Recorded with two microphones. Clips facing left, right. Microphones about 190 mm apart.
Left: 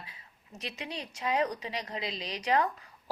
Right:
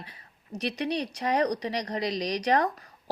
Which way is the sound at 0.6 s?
70° right (ahead or behind).